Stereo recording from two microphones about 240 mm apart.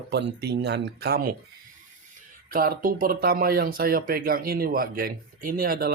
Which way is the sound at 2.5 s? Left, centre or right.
Right.